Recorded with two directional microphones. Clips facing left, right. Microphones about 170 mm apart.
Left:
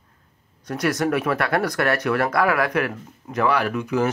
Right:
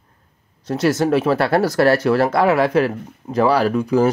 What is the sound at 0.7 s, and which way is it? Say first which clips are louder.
Speech: right 5 dB; 25° right (ahead or behind).